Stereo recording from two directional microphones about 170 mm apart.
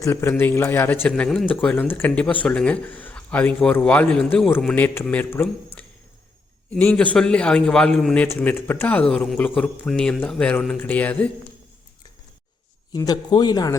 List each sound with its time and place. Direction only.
0.0 s speech: 15° left (ahead or behind)
12.9 s a man's voice: 20° left (ahead or behind)